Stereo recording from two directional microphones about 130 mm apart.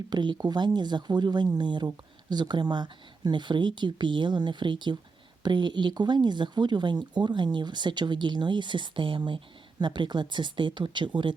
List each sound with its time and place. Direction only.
0.1 s speech: 35° right (ahead or behind)